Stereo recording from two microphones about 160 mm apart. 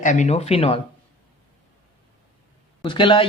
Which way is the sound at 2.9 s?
30° left (ahead or behind).